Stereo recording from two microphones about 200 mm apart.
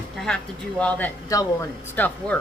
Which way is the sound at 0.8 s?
5° left (ahead or behind).